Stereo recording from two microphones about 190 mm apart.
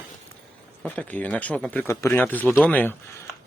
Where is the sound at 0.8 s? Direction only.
10° left (ahead or behind).